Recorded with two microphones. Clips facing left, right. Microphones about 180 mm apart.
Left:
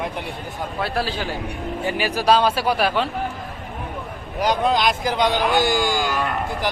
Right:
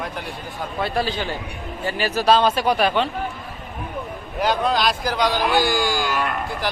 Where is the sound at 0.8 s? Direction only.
5° left (ahead or behind).